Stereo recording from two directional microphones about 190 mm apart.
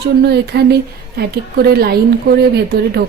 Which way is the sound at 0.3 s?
60° right (ahead or behind).